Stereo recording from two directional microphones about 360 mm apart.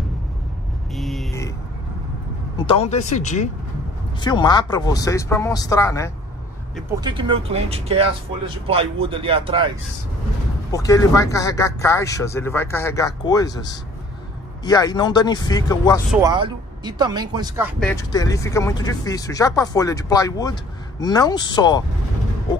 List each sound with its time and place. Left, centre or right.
0.9 s a sound: centre
2.5 s speech: centre
7.0 s speech: centre
10.7 s speech: centre
16.1 s speech: centre
17.7 s speech: centre